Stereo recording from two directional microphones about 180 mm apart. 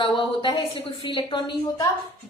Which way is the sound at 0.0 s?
25° left (ahead or behind).